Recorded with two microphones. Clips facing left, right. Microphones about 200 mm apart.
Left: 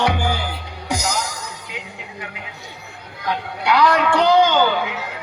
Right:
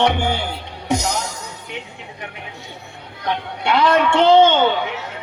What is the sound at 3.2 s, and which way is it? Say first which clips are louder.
A man's voice: even; 25° right (ahead or behind).